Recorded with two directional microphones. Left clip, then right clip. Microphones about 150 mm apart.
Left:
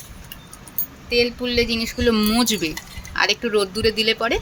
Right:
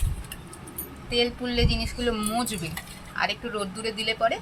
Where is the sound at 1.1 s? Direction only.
60° left (ahead or behind).